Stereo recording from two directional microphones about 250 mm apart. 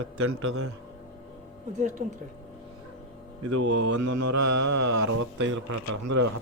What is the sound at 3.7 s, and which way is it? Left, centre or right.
Mantra, right.